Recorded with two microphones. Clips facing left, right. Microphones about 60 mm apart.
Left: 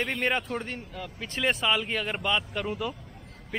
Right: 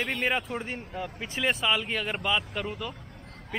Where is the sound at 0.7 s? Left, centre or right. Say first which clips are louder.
Right 3 dB; centre.